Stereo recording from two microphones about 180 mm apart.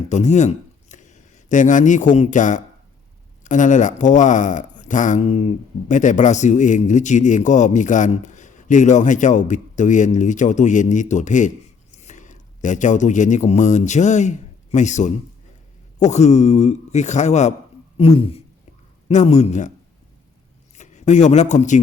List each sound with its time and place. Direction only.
0.1 s a man's voice: 40° left (ahead or behind)
20.7 s speech: 40° left (ahead or behind)